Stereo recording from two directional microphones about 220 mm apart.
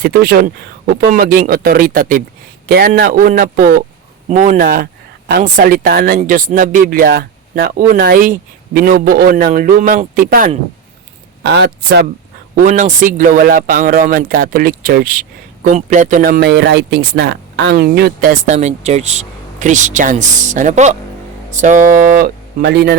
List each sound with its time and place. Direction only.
0.0 s speech: 45° right (ahead or behind)